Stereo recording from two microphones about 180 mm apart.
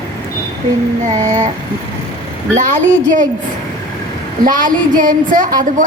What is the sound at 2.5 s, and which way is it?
Speech, 40° right (ahead or behind).